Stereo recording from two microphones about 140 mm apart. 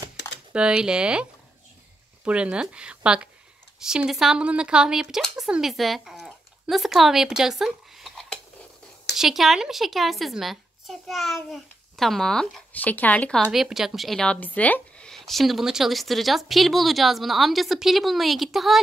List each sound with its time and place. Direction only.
0.5 s speech: 5° right (ahead or behind)
2.2 s speech: 10° right (ahead or behind); by 13.4 s 10° left (ahead or behind)
13.4 s speech: 5° right (ahead or behind)